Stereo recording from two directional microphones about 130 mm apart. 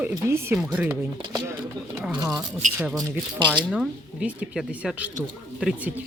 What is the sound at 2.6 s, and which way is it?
Speech, 75° right (ahead or behind).